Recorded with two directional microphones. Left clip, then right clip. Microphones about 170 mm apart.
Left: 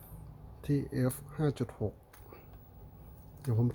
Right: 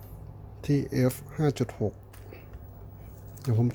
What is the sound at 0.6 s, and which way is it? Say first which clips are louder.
Speech: right 7 dB; 5° right (ahead or behind).